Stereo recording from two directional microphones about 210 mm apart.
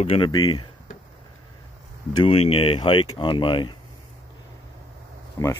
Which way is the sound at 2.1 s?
25° left (ahead or behind).